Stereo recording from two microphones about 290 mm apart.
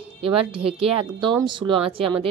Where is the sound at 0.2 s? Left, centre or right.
Centre.